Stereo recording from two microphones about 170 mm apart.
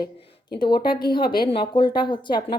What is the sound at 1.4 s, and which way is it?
Speech, 30° left (ahead or behind).